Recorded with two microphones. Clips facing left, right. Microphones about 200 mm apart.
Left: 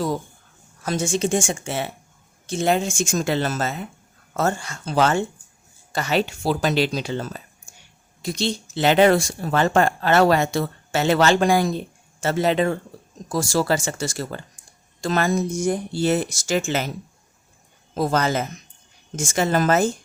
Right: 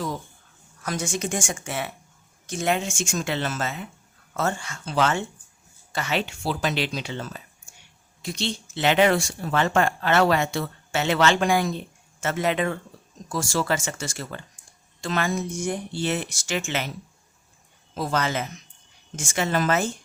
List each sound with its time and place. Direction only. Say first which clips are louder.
0.8 s speech: left 6 dB; 25° left (ahead or behind)
17.9 s speech: left 5 dB; 45° left (ahead or behind)